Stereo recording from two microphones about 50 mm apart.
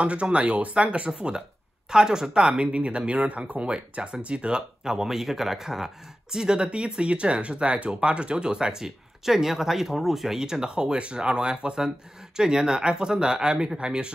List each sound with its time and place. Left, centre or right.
0.0 s speech: right